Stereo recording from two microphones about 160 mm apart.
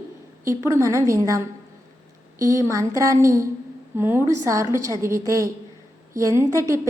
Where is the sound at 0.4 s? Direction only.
15° right (ahead or behind).